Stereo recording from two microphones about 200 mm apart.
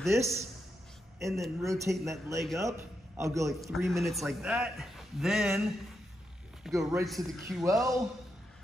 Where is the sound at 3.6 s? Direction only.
Centre (ahead or behind).